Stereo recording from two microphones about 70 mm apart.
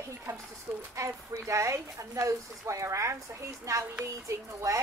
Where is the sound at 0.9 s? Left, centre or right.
Right.